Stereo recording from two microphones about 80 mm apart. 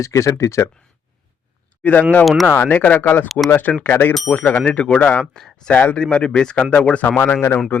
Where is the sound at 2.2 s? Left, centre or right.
Centre.